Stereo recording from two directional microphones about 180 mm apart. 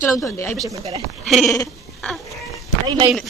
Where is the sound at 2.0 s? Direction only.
Centre (ahead or behind).